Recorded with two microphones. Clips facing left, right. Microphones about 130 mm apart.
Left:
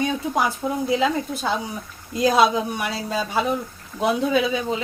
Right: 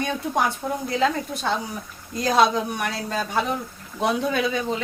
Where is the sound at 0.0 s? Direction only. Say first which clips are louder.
Left 1 dB; 5° left (ahead or behind).